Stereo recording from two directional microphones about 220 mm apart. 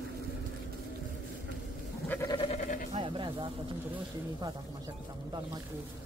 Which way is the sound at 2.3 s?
30° left (ahead or behind).